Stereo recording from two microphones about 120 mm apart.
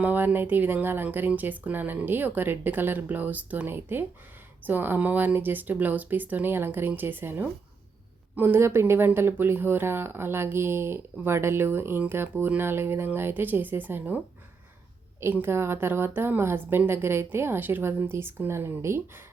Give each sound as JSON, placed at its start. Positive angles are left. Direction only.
{"t": 0.0, "sound": "speech", "side_deg": -15}
{"t": 15.2, "sound": "speech", "side_deg": -20}